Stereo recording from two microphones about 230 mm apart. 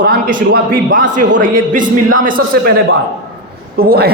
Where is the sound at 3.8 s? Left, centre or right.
Right.